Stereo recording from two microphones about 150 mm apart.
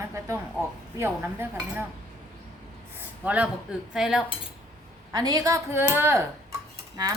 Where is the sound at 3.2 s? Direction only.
10° right (ahead or behind).